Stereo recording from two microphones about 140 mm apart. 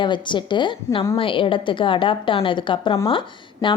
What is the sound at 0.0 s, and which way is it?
A woman's voice, 35° left (ahead or behind).